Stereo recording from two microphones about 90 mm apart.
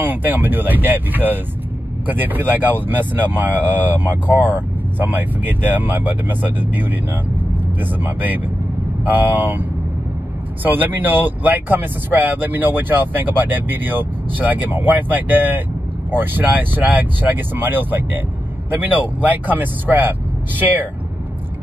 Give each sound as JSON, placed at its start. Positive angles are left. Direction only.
{"t": 0.0, "sound": "speech", "side_deg": -20}
{"t": 10.6, "sound": "speech", "side_deg": -20}